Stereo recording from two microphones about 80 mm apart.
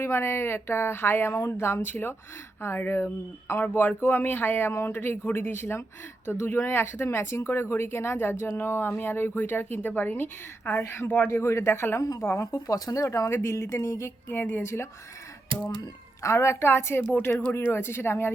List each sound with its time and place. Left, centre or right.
0.0 s speech: left
1.4 s speech: left
12.4 s speech: left
14.3 s speech: left
16.2 s speech: left